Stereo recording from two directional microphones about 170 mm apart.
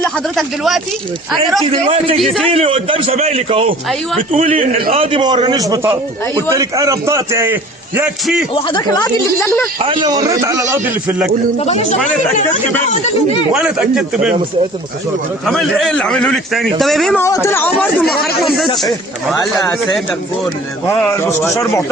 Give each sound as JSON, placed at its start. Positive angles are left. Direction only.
{"t": 0.0, "sound": "a man's voice", "side_deg": 0}
{"t": 1.7, "sound": "a man's voice", "side_deg": -30}
{"t": 2.1, "sound": "a man's voice", "side_deg": 0}
{"t": 2.5, "sound": "a man's voice", "side_deg": -35}
{"t": 8.5, "sound": "speech", "side_deg": 30}
{"t": 9.8, "sound": "a man's voice", "side_deg": -30}
{"t": 11.6, "sound": "speech", "side_deg": 40}
{"t": 13.5, "sound": "a man's voice", "side_deg": -5}
{"t": 15.4, "sound": "a man's voice", "side_deg": 0}
{"t": 17.2, "sound": "a man's voice", "side_deg": 15}
{"t": 18.0, "sound": "a man's voice", "side_deg": 0}